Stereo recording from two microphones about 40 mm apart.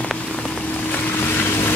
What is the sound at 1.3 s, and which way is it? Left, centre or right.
Vehicle, left.